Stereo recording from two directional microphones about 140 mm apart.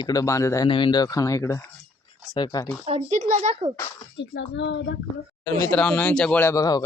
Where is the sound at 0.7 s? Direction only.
35° left (ahead or behind).